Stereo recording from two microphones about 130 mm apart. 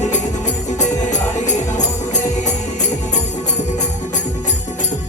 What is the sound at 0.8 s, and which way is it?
Music, 65° left (ahead or behind).